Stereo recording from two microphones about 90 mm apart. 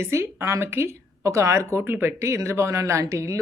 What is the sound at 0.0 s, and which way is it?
Speech, 30° right (ahead or behind).